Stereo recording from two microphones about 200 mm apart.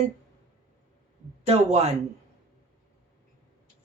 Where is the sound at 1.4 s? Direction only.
30° right (ahead or behind).